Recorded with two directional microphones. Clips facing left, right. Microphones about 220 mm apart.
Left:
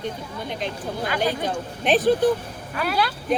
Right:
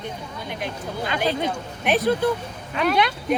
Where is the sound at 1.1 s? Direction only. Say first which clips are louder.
Right 1 dB; 25° right (ahead or behind).